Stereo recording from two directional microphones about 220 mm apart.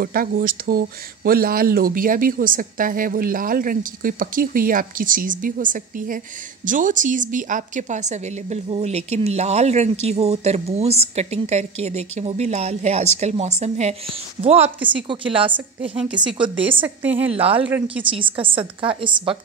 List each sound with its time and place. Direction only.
0.0 s a woman's voice: 40° right (ahead or behind); by 15.5 s 25° right (ahead or behind)
16.6 s a woman's voice: 10° right (ahead or behind)
17.3 s a woman's voice: 25° right (ahead or behind)